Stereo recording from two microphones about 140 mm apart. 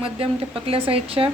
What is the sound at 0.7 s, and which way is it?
Speech, 40° right (ahead or behind).